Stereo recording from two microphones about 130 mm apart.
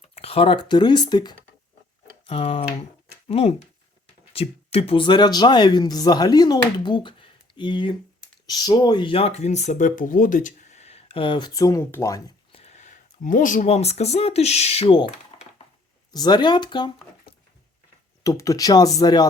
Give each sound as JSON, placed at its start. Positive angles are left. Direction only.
{"t": 0.1, "sound": "speech", "side_deg": 50}
{"t": 2.2, "sound": "speech", "side_deg": 45}
{"t": 12.5, "sound": "speech", "side_deg": 50}
{"t": 15.1, "sound": "a sound", "side_deg": 50}
{"t": 16.1, "sound": "speech", "side_deg": 30}
{"t": 18.2, "sound": "speech", "side_deg": 25}